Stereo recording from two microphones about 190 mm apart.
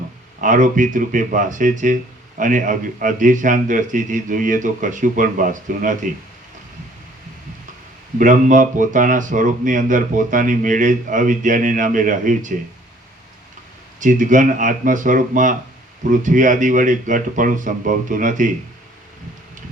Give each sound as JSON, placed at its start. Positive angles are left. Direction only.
{"t": 0.4, "sound": "speech", "side_deg": -40}
{"t": 8.2, "sound": "speech", "side_deg": -45}
{"t": 14.0, "sound": "speech", "side_deg": -40}